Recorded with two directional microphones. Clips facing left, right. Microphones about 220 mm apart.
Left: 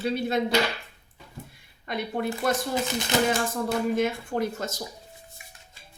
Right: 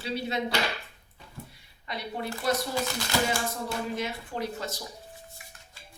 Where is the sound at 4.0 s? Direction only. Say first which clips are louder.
Left 7 dB; 50° left (ahead or behind).